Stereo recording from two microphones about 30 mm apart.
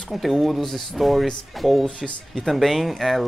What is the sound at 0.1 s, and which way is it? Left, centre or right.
Speech, centre.